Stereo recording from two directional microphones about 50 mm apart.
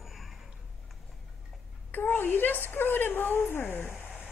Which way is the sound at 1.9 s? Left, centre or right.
Left.